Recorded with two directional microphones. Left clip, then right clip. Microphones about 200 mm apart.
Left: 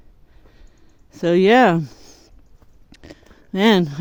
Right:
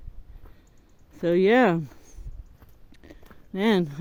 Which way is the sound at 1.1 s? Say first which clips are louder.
Left 6 dB; 35° left (ahead or behind).